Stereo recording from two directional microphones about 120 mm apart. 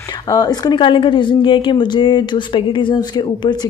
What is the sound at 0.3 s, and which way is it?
Speech, 35° left (ahead or behind).